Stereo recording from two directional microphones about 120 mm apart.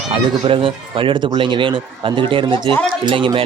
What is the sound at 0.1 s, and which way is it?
Speech, 50° right (ahead or behind).